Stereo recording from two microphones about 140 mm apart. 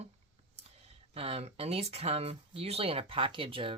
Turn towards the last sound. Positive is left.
turn(degrees=-40)  # may be behind; listen again after turning